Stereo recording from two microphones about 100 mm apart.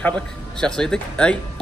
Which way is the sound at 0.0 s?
10° left (ahead or behind).